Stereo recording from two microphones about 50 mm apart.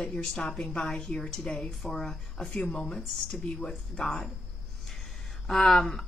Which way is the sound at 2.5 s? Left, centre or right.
Left.